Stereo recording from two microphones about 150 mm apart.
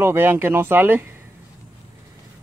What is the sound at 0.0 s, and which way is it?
Speech, 15° right (ahead or behind).